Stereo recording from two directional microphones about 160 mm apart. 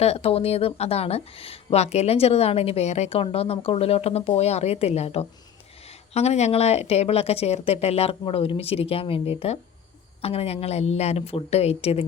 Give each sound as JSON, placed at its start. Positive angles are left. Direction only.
{"t": 0.0, "sound": "speech", "side_deg": 40}